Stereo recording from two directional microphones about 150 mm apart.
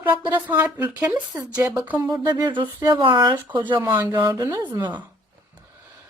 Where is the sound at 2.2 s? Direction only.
30° right (ahead or behind).